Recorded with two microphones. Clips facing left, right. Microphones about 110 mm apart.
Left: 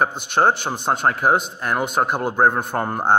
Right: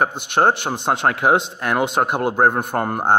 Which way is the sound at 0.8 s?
75° right (ahead or behind).